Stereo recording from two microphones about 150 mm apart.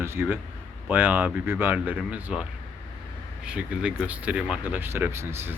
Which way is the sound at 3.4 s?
5° right (ahead or behind).